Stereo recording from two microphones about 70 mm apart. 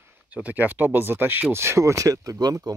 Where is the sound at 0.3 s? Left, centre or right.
Right.